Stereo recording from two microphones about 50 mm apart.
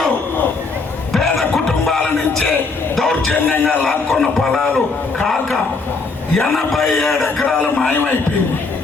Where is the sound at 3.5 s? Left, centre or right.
Left.